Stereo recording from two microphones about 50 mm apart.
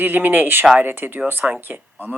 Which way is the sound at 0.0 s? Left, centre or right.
Right.